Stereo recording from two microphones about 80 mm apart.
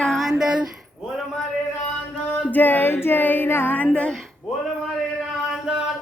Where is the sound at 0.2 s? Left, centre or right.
Centre.